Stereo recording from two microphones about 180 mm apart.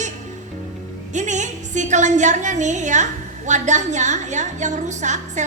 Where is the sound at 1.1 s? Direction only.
40° right (ahead or behind).